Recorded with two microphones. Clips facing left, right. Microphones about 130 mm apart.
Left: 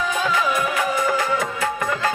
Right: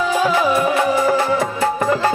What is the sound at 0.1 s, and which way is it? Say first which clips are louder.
Music: right 7 dB; 35° right (ahead or behind).